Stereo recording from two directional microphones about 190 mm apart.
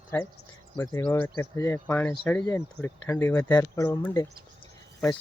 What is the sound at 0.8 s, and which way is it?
Speech, 10° left (ahead or behind).